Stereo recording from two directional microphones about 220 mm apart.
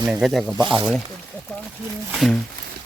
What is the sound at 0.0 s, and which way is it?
Speech, 5° right (ahead or behind).